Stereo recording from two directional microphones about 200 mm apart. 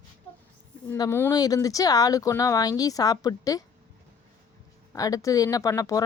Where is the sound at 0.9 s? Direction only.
15° left (ahead or behind).